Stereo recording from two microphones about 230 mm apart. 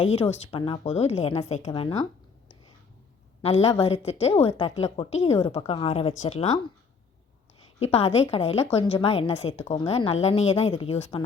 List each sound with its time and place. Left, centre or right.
0.0 s a woman's voice: left
3.4 s a woman's voice: left
7.8 s a woman's voice: left